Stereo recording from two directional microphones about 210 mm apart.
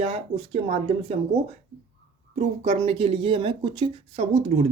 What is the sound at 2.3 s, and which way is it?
Speech, 30° right (ahead or behind).